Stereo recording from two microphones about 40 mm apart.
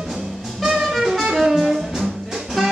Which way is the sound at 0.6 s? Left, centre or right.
Centre.